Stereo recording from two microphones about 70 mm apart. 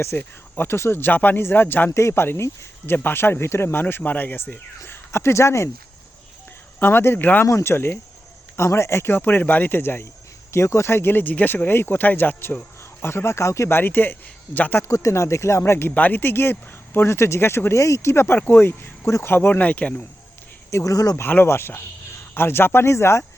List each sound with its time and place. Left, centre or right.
0.2 s speech: left
1.9 s speech: left
4.9 s speech: left
6.7 s speech: left
7.4 s speech: left
10.5 s speech: left
14.8 s speech: left
16.0 s speech: left
20.7 s speech: left
21.2 s speech: left